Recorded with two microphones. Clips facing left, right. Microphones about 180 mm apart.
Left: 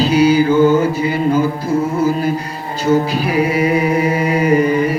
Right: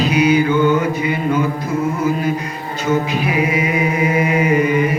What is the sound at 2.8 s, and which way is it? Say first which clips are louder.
Music: left 3 dB; 35° left (ahead or behind).